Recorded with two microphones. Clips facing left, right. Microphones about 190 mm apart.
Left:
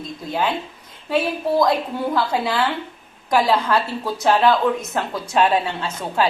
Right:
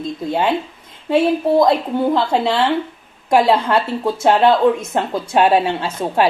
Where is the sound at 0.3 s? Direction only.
25° right (ahead or behind).